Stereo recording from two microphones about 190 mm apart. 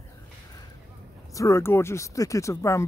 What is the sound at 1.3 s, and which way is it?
Speech, 15° left (ahead or behind).